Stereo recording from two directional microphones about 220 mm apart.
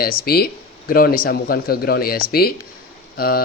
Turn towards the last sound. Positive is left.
turn(degrees=45)  # may be behind; listen again after turning